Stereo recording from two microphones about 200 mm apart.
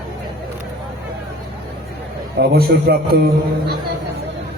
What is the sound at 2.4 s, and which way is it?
Speech, 50° right (ahead or behind).